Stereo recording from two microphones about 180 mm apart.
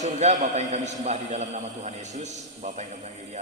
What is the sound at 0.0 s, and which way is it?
A man's voice, 40° right (ahead or behind).